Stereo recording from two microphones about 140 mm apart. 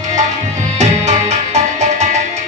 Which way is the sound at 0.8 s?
55° right (ahead or behind).